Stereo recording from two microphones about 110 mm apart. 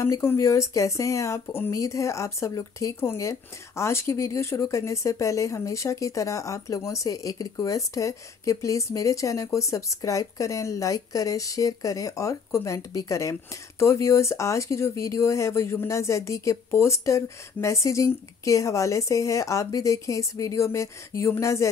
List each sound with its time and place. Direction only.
0.0 s speech: 25° left (ahead or behind)